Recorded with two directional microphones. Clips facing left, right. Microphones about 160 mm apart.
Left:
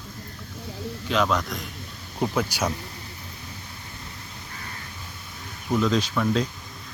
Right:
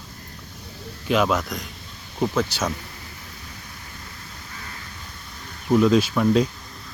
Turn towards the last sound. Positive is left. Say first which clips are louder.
# right 5 dB
turn(degrees=-15)  # may be behind; listen again after turning